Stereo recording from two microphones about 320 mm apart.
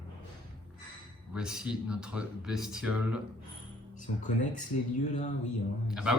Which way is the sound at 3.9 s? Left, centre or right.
Left.